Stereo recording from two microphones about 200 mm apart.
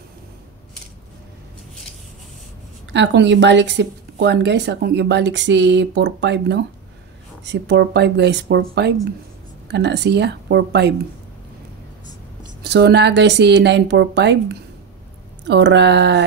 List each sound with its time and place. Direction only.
2.9 s a woman's voice: 60° right (ahead or behind)
12.6 s a woman's voice: 55° right (ahead or behind)